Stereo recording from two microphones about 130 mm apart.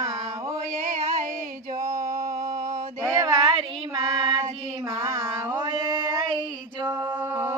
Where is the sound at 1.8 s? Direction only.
25° right (ahead or behind).